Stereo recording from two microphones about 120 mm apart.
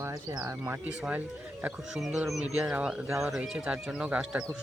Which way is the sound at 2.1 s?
5° right (ahead or behind).